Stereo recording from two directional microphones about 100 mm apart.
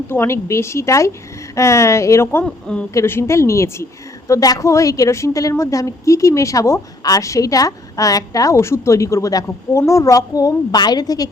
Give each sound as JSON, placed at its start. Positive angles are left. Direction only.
{"t": 0.1, "sound": "a woman's voice", "side_deg": 25}
{"t": 2.4, "sound": "speech", "side_deg": 10}
{"t": 2.9, "sound": "a woman's voice", "side_deg": 30}